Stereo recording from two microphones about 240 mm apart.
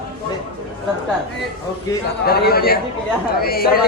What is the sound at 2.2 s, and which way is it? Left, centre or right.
A man's voice, left.